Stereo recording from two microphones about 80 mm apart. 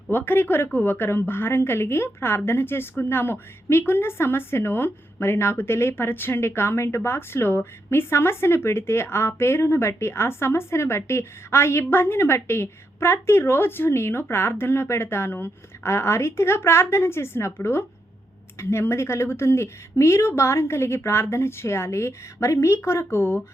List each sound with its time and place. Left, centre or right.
0.1 s a woman's voice: left